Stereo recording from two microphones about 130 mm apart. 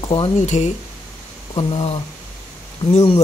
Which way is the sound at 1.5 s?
40° left (ahead or behind).